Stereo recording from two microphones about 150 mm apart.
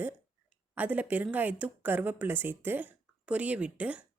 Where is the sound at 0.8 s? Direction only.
10° right (ahead or behind).